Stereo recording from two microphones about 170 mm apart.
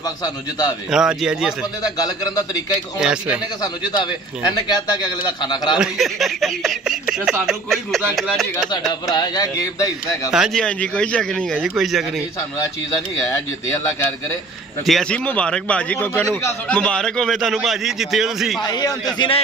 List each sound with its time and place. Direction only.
0.2 s a man's voice: 20° left (ahead or behind)
0.8 s a man's voice: 5° right (ahead or behind)
1.8 s a man's voice: 20° left (ahead or behind)
3.0 s a man's voice: 5° right (ahead or behind)
3.6 s a man's voice: 25° left (ahead or behind)
5.8 s a man's voice: centre (ahead or behind)
9.1 s a man's voice: 25° left (ahead or behind)
10.3 s a man's voice: centre (ahead or behind)
14.9 s a man's voice: 5° left (ahead or behind)
18.6 s a man's voice: 25° left (ahead or behind)